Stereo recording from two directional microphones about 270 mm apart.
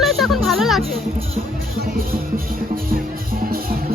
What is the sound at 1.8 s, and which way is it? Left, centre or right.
Music, right.